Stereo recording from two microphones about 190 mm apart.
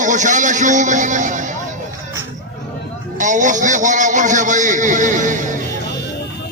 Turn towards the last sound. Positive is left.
turn(degrees=-40)  # may be behind; listen again after turning